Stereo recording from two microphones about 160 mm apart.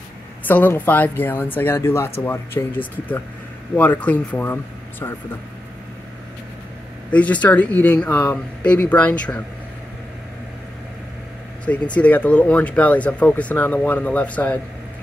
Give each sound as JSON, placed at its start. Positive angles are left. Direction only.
{"t": 0.4, "sound": "speech", "side_deg": 10}
{"t": 7.1, "sound": "speech", "side_deg": 10}
{"t": 11.6, "sound": "speech", "side_deg": 10}